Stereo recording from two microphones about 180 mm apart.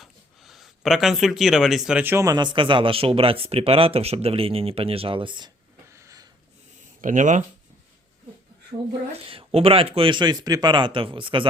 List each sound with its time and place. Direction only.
0.0 s speech: centre (ahead or behind); by 5.5 s 25° right (ahead or behind)
5.9 s a sound: 15° right (ahead or behind)
7.0 s speech: 45° right (ahead or behind)
8.7 s speech: 30° right (ahead or behind)